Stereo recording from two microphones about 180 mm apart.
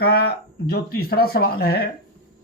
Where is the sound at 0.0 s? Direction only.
60° left (ahead or behind).